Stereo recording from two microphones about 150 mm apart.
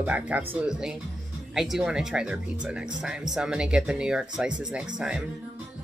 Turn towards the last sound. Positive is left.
turn(degrees=-5)  # may be behind; listen again after turning